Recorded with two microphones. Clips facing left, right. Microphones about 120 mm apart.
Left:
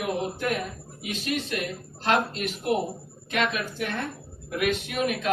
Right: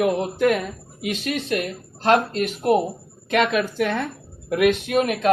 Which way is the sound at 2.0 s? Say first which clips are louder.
Right 6 dB; 50° right (ahead or behind).